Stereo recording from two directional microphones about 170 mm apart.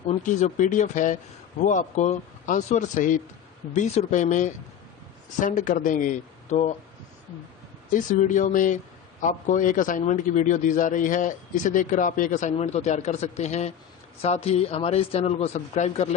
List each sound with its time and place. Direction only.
0.1 s a man's voice: 45° left (ahead or behind)
7.9 s a man's voice: 50° left (ahead or behind)